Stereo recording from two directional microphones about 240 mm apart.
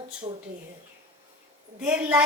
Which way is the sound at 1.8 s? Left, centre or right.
Centre.